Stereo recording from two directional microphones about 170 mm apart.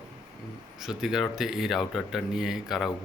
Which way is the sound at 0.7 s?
Centre (ahead or behind).